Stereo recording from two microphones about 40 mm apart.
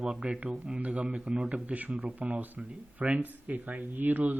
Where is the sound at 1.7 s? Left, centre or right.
Right.